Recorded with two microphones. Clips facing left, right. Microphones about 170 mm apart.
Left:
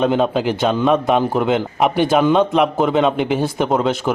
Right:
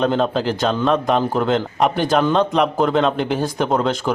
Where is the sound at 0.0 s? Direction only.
5° left (ahead or behind).